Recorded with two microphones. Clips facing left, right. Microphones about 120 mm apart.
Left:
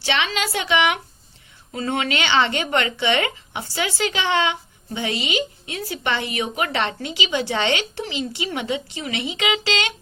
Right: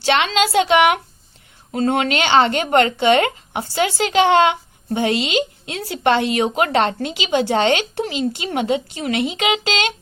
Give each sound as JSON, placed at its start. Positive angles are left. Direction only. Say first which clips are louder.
{"t": 0.0, "sound": "a woman's voice", "louder": "right 6 dB", "side_deg": -55}